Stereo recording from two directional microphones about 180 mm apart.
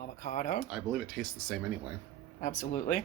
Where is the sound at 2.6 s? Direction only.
45° left (ahead or behind).